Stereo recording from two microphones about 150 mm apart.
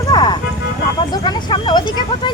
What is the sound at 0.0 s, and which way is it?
Music, 30° left (ahead or behind).